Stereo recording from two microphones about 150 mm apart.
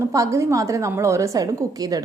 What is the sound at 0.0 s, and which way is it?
A woman's voice, 20° right (ahead or behind).